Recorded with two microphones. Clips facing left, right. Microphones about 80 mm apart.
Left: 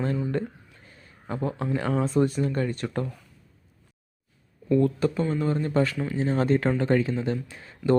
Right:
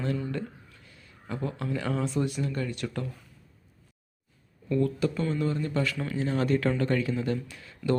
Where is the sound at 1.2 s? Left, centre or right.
Left.